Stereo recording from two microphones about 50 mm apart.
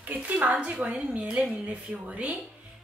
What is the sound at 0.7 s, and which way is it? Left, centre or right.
A woman's voice, centre.